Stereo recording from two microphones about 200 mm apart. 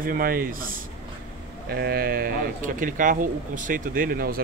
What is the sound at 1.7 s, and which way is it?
Speech, 50° right (ahead or behind).